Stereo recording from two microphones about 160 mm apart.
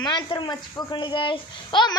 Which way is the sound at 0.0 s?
25° left (ahead or behind).